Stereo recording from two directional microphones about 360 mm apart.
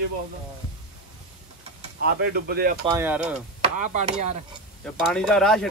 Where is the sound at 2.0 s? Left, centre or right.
Right.